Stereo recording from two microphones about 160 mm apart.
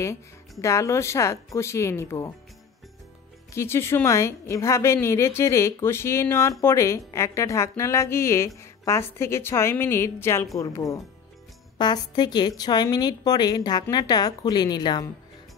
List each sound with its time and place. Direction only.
0.0 s a woman's voice: 20° left (ahead or behind)
3.5 s a woman's voice: 15° left (ahead or behind)